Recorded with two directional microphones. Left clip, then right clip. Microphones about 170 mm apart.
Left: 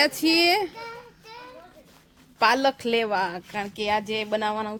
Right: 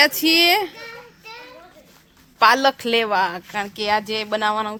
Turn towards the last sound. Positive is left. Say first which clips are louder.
# right 5 dB
turn(degrees=5)  # may be behind; listen again after turning